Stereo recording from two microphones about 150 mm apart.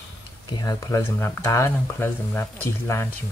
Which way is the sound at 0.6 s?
25° left (ahead or behind).